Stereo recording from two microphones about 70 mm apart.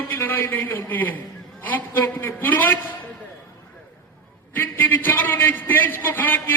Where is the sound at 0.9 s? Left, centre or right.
Left.